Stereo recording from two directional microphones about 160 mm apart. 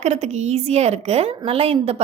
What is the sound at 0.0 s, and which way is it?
A woman's voice, 45° right (ahead or behind).